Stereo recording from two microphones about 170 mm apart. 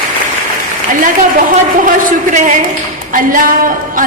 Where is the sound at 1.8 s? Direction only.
50° right (ahead or behind).